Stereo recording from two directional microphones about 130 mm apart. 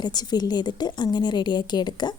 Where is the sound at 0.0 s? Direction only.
30° left (ahead or behind).